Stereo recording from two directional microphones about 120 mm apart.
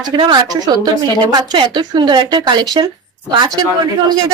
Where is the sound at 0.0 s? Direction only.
35° right (ahead or behind).